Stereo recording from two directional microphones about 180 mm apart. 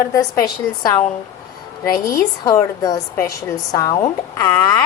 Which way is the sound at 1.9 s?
50° left (ahead or behind).